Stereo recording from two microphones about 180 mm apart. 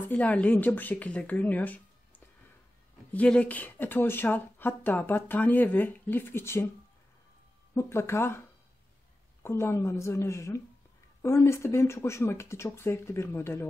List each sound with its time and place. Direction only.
0.1 s speech: 10° left (ahead or behind)
7.7 s speech: 15° left (ahead or behind)